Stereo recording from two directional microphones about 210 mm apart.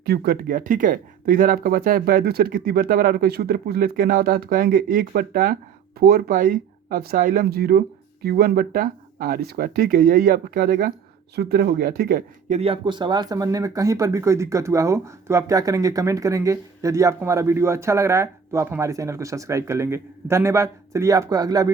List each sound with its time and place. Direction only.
0.0 s speech: 50° right (ahead or behind)
12.5 s speech: 25° right (ahead or behind)